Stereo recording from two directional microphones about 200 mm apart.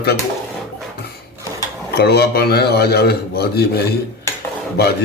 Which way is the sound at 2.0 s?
50° left (ahead or behind).